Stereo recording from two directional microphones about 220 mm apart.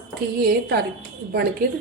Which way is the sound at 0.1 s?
45° right (ahead or behind).